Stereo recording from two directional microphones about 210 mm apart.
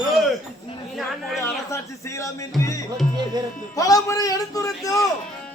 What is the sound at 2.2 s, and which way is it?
Music, 15° left (ahead or behind).